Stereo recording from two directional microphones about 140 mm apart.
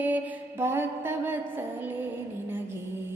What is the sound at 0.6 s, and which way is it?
Music, 15° right (ahead or behind).